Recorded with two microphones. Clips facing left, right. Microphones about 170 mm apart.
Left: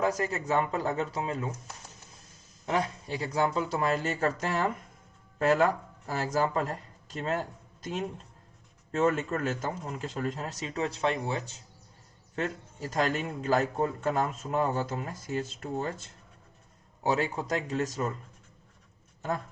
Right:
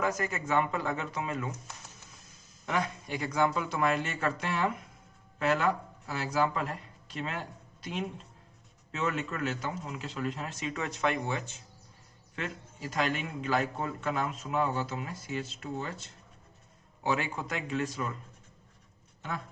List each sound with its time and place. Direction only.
0.0 s speech: 35° left (ahead or behind)
2.6 s speech: 30° left (ahead or behind)
17.0 s speech: 40° left (ahead or behind)